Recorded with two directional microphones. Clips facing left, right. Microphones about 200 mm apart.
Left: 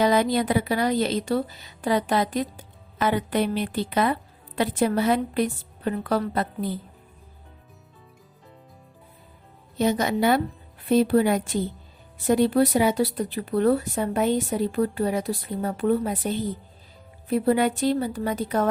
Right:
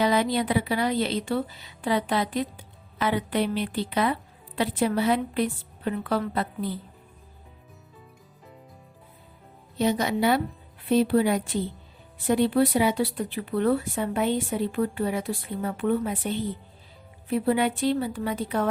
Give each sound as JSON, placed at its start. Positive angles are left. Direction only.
{"t": 0.0, "sound": "speech", "side_deg": 45}
{"t": 9.7, "sound": "speech", "side_deg": 45}